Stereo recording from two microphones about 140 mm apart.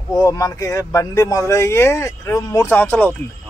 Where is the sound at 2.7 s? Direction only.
15° left (ahead or behind).